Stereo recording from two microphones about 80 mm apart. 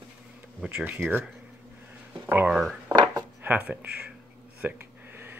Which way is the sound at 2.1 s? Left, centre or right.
Right.